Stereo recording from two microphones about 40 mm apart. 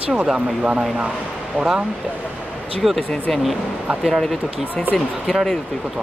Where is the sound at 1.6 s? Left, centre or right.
Right.